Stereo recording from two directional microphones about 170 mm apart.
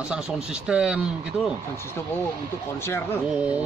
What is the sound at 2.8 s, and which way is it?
Speech, 15° left (ahead or behind).